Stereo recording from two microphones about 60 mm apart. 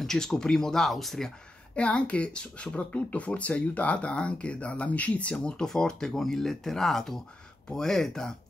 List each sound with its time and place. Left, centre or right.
0.0 s speech: centre
1.8 s speech: left